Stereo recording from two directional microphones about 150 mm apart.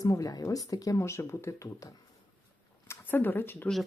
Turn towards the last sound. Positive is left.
turn(degrees=15)  # may be behind; listen again after turning